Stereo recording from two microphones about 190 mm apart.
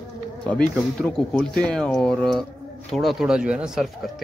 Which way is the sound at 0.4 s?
5° left (ahead or behind).